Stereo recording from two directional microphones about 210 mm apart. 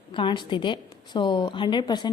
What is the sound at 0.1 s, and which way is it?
A woman's voice, 25° left (ahead or behind).